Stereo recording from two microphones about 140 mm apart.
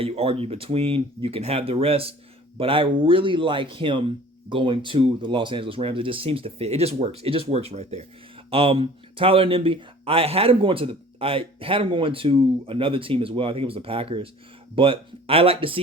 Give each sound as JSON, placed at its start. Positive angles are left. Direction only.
{"t": 0.0, "sound": "speech", "side_deg": -45}